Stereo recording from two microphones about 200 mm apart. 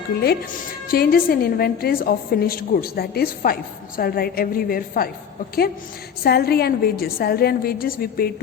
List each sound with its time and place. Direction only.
0.9 s a woman's voice: 50° left (ahead or behind)
6.2 s a woman's voice: 50° left (ahead or behind)